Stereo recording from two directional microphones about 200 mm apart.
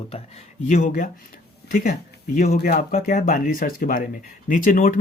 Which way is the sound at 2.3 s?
45° left (ahead or behind).